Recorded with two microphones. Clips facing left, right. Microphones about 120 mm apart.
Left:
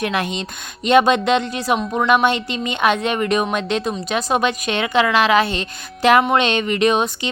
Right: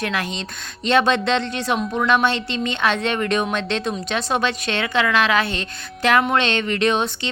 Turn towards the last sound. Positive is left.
turn(degrees=10)  # may be behind; listen again after turning